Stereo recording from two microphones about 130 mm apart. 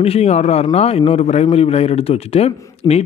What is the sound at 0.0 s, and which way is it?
A man's voice, 50° left (ahead or behind).